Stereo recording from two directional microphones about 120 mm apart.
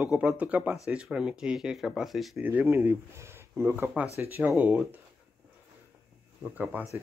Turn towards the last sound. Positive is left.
turn(degrees=-15)  # may be behind; listen again after turning